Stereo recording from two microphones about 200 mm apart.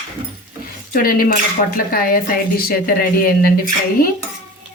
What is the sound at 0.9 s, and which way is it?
Speech, 45° left (ahead or behind).